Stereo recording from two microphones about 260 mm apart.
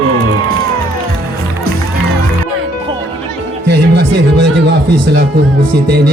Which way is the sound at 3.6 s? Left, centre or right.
Right.